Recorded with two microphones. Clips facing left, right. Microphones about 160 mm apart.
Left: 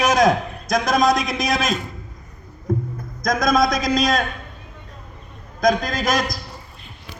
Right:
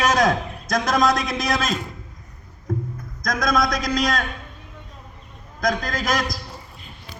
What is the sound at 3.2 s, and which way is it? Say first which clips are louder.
A man's voice: left 4 dB; 20° left (ahead or behind).